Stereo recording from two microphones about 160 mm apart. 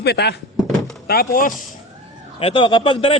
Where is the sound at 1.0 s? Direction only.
70° left (ahead or behind).